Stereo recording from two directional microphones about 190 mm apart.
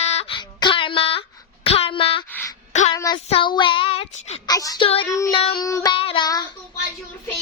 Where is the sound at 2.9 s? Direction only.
20° left (ahead or behind).